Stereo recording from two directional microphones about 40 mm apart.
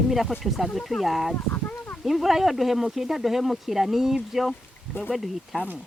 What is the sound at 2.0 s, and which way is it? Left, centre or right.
Speech, centre.